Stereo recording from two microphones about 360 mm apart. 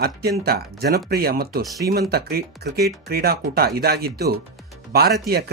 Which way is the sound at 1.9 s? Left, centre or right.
Right.